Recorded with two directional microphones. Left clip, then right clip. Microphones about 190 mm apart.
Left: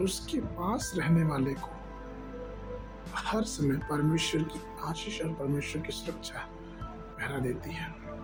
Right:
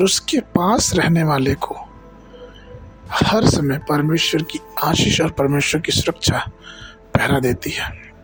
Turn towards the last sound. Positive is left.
turn(degrees=-55)  # may be behind; listen again after turning